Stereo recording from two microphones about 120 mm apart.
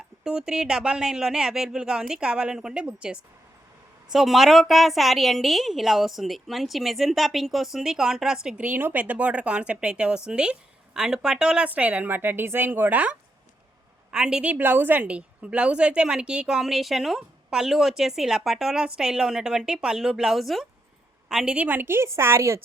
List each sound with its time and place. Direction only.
0.3 s a woman's voice: 5° right (ahead or behind); by 22.6 s 25° right (ahead or behind)